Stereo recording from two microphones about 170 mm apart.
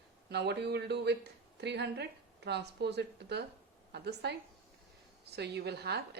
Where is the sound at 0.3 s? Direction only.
80° right.